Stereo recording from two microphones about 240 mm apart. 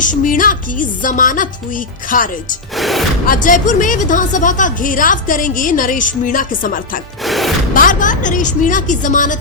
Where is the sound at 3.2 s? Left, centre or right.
Left.